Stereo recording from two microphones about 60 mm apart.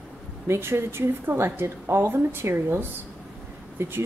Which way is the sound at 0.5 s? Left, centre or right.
Right.